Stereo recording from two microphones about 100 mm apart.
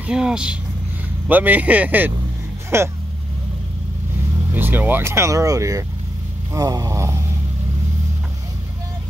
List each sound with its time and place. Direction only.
0.0 s speech: 10° right (ahead or behind); by 2.9 s 25° right (ahead or behind)
4.6 s speech: 20° right (ahead or behind)